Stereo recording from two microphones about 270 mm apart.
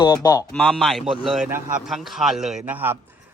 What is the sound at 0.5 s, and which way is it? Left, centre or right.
Speech, centre.